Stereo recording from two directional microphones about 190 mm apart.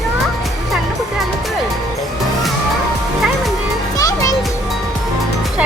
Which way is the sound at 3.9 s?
20° left (ahead or behind).